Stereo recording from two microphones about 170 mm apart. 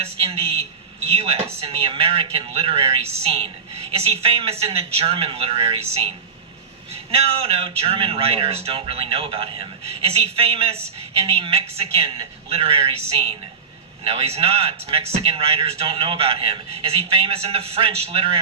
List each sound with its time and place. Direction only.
0.0 s a woman's voice: 35° right (ahead or behind)
1.1 s a sound: 35° right (ahead or behind)
1.6 s speech: 30° right (ahead or behind)